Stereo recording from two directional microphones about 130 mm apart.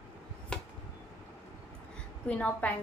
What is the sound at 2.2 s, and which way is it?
Speech, 10° left (ahead or behind).